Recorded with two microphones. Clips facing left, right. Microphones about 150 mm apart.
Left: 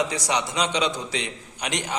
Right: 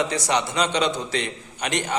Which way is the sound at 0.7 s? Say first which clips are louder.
Right 2 dB; 60° right (ahead or behind).